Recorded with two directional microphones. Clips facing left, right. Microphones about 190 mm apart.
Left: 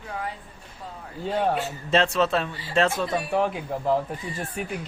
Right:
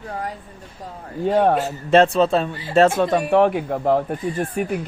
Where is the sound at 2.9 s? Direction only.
70° right (ahead or behind).